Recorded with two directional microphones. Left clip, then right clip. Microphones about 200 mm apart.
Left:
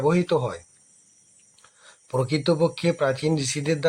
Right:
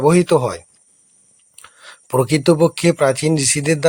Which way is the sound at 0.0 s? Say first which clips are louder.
Right 8 dB; 35° right (ahead or behind).